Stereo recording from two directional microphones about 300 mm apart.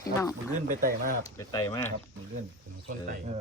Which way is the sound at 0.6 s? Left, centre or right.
Right.